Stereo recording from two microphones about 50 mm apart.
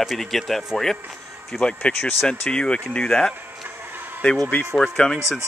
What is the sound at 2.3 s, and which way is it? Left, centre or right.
Speech, centre.